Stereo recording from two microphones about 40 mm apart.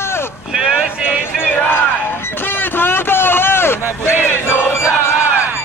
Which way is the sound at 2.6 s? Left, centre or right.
Left.